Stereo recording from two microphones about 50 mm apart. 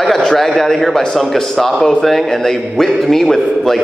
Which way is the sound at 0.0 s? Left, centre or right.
Centre.